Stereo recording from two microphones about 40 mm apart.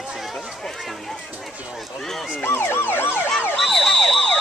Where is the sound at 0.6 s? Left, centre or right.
Centre.